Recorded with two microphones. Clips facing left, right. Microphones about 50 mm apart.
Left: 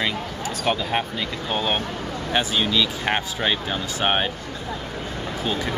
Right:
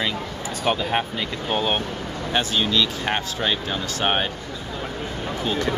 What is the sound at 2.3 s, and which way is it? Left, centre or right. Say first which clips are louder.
Speech: even; centre.